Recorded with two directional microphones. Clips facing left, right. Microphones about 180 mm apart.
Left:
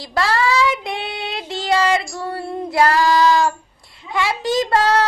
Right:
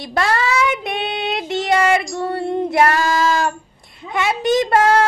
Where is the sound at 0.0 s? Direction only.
25° right (ahead or behind).